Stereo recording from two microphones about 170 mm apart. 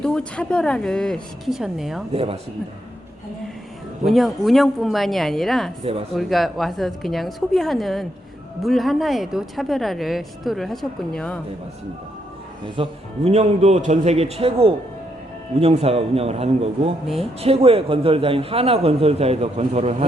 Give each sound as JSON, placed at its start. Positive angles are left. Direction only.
{"t": 0.0, "sound": "speech", "side_deg": 5}
{"t": 2.1, "sound": "a man's voice", "side_deg": -35}
{"t": 4.0, "sound": "speech", "side_deg": 0}
{"t": 12.6, "sound": "a man's voice", "side_deg": -30}